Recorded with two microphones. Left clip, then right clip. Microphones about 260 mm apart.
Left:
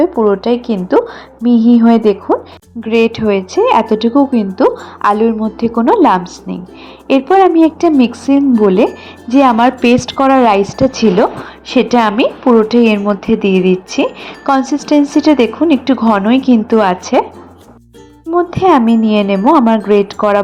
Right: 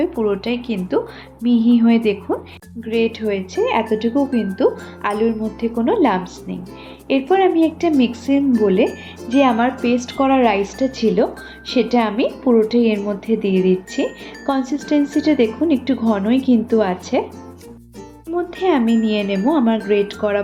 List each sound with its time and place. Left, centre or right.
0.0 s a woman's voice: centre
18.3 s a woman's voice: left